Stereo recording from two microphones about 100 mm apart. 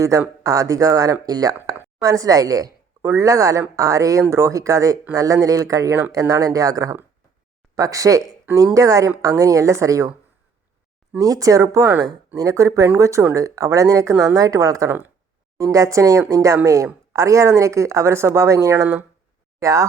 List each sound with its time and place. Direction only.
0.0 s speech: 30° right (ahead or behind)
11.2 s speech: 35° right (ahead or behind)
14.8 s speech: 20° right (ahead or behind)
15.5 s speech: 35° right (ahead or behind)